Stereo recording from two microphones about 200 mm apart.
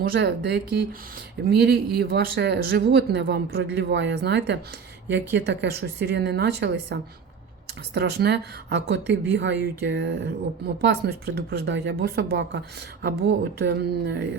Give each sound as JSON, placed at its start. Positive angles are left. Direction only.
{"t": 0.1, "sound": "speech", "side_deg": -55}